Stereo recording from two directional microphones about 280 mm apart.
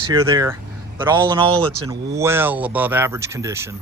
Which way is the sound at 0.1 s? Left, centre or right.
Centre.